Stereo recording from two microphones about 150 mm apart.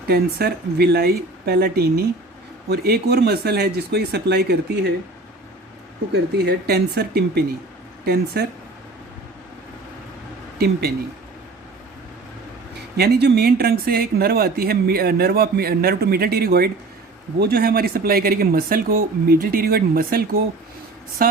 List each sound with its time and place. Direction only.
0.1 s speech: 90° right
6.1 s speech: 90° right
10.6 s speech: 90° right
13.0 s speech: 90° right